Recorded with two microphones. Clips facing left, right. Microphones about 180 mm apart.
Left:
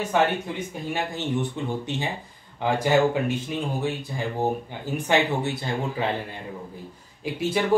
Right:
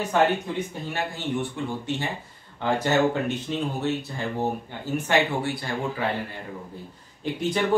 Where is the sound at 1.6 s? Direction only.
20° left (ahead or behind).